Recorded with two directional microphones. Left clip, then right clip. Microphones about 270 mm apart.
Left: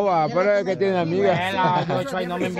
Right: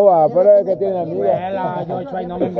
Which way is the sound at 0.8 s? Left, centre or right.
Left.